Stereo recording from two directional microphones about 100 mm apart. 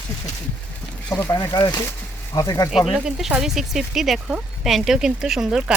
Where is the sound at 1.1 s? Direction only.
25° left (ahead or behind).